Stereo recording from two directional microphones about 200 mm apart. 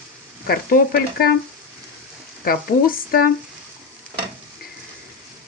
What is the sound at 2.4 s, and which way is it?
Speech, 45° left (ahead or behind).